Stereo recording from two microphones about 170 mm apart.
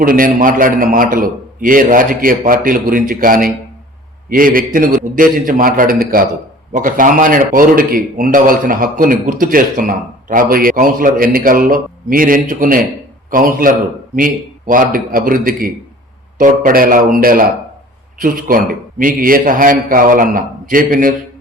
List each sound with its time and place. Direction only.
0.0 s speech: 55° right (ahead or behind)